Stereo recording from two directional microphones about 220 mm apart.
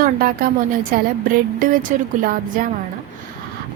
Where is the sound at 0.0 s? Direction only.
40° right (ahead or behind).